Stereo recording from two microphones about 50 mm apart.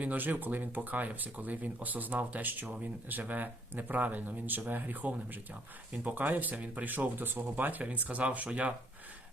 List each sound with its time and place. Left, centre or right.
0.0 s speech: right